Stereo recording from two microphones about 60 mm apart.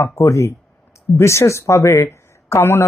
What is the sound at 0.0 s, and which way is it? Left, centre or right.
Speech, left.